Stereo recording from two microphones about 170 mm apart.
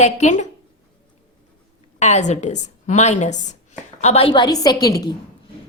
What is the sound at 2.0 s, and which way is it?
A woman's voice, 45° left (ahead or behind).